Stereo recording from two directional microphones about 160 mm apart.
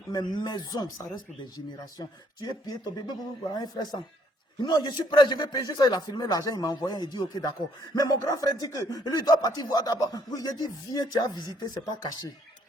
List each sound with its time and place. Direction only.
0.1 s speech: 30° left (ahead or behind)